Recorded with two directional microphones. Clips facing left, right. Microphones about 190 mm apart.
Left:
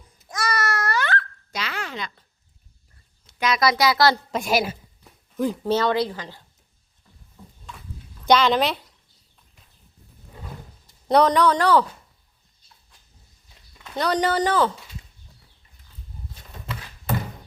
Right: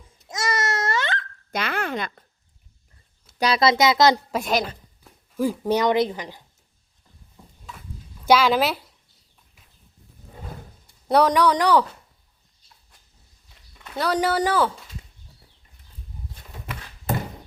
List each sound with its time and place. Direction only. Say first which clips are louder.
0.3 s babbling: even; 20° right (ahead or behind)
1.5 s a sound: right 5 dB; 55° right (ahead or behind)
3.4 s speech: right 2 dB; 30° right (ahead or behind)
4.3 s a woman's voice: even; 5° right (ahead or behind)
4.5 s speech: left 2 dB; 5° left (ahead or behind)
5.4 s speech: right 1 dB; 10° right (ahead or behind)
7.7 s a sound: right 1 dB; 5° right (ahead or behind)
8.2 s speech: even; 5° right (ahead or behind)
11.1 s speech: left 1 dB; 10° right (ahead or behind)
13.9 s speech: even; 5° right (ahead or behind)